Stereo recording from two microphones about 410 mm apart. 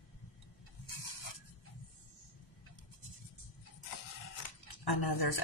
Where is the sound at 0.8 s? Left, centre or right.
Left.